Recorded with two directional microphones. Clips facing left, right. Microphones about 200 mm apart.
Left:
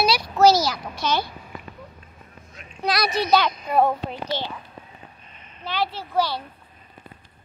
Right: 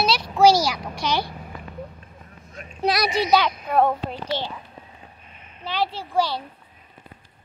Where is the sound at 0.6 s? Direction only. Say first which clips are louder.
Even; 15° right (ahead or behind).